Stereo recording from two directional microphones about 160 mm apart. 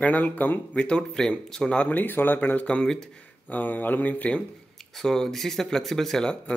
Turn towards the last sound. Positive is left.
turn(degrees=5)  # may be behind; listen again after turning